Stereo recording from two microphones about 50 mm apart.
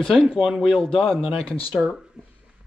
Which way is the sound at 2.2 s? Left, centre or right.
Centre.